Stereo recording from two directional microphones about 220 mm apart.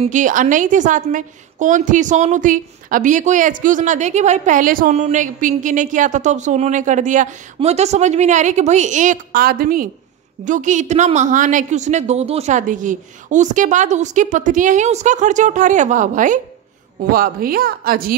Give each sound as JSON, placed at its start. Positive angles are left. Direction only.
{"t": 0.0, "sound": "a woman's voice", "side_deg": -35}